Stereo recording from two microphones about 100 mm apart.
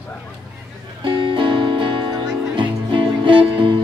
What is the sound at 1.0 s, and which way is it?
Music, 55° right (ahead or behind).